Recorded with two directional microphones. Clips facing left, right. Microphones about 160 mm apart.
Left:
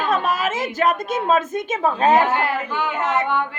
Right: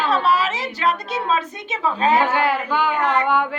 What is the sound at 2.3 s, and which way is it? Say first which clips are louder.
Speech: right 2 dB; 90° right.